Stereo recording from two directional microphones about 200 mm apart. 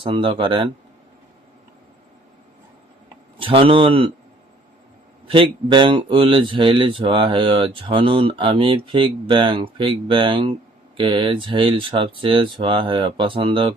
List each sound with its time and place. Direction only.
0.0 s speech: 25° right (ahead or behind)
3.3 s speech: 25° right (ahead or behind)
5.3 s speech: 25° right (ahead or behind)